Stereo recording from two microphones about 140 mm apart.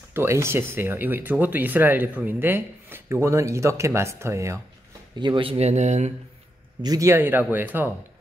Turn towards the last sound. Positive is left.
turn(degrees=-15)  # may be behind; listen again after turning